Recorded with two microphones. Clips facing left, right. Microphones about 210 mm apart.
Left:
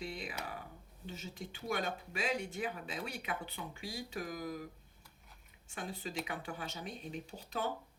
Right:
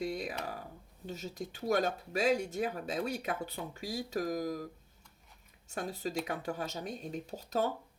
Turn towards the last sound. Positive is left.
turn(degrees=-40)  # may be behind; listen again after turning